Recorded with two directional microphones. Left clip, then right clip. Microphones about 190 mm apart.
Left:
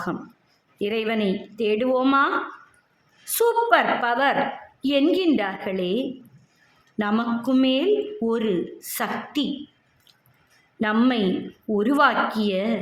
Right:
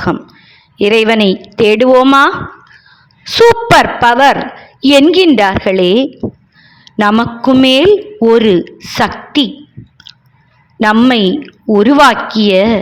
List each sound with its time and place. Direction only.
0.8 s a woman's voice: 50° right (ahead or behind)
3.3 s a woman's voice: 50° right (ahead or behind)
10.8 s a woman's voice: 45° right (ahead or behind)